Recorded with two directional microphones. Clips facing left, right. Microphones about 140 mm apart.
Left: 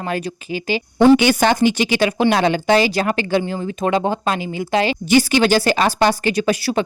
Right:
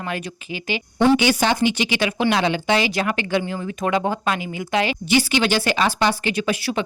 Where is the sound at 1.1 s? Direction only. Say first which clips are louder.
Left 4 dB; 50° left (ahead or behind).